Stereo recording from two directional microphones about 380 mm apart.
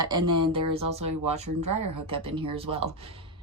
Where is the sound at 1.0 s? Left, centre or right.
Right.